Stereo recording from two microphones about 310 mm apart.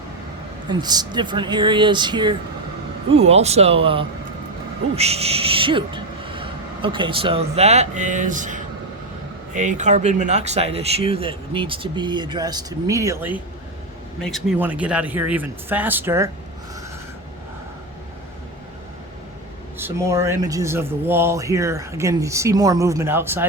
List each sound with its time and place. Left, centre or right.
0.7 s speech: centre
19.8 s speech: centre